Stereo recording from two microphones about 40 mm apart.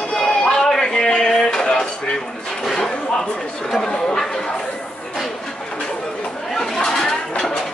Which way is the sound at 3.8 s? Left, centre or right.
Centre.